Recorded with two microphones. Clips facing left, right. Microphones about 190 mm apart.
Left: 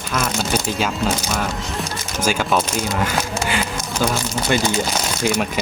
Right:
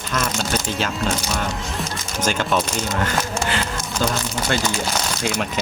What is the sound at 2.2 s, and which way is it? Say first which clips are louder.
Speech: left 2 dB; 10° left (ahead or behind).